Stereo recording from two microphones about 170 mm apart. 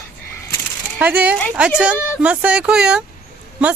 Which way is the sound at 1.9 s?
15° left (ahead or behind).